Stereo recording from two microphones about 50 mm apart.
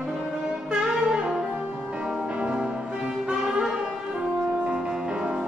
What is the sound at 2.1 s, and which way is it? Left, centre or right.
Music, right.